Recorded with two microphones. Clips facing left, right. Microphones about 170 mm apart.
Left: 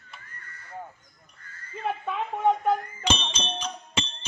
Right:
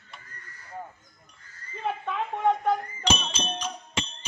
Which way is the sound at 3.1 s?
5° right (ahead or behind).